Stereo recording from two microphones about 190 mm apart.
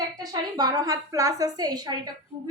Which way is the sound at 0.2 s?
20° right (ahead or behind).